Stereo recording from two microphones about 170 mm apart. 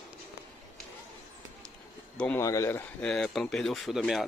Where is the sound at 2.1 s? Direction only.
5° left (ahead or behind).